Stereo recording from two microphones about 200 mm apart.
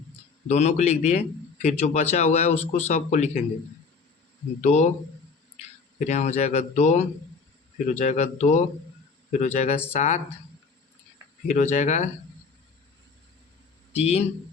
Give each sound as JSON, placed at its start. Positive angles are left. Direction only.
{"t": 0.4, "sound": "a man's voice", "side_deg": 35}
{"t": 4.6, "sound": "a man's voice", "side_deg": 35}
{"t": 6.0, "sound": "a man's voice", "side_deg": 35}
{"t": 11.4, "sound": "a man's voice", "side_deg": 35}
{"t": 13.9, "sound": "a man's voice", "side_deg": 30}